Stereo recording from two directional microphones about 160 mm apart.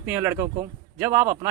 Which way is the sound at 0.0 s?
15° right (ahead or behind).